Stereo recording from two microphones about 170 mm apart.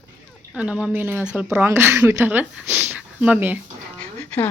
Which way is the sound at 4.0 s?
10° left (ahead or behind).